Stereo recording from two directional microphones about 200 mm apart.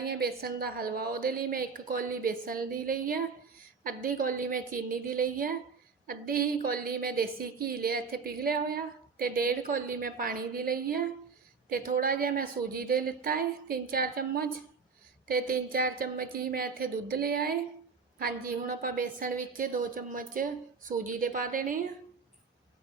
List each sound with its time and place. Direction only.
0.0 s a woman's voice: 50° right (ahead or behind)